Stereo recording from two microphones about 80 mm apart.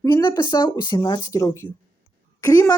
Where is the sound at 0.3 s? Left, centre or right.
Left.